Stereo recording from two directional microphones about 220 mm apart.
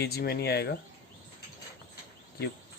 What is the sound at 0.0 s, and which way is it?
Speech, 45° left (ahead or behind).